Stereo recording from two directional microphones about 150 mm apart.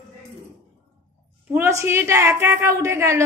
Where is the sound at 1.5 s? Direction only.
15° right (ahead or behind).